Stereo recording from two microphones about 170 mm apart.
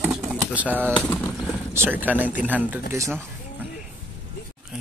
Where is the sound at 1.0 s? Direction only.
10° left (ahead or behind).